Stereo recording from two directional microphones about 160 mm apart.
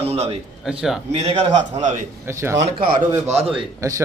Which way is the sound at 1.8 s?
50° right (ahead or behind).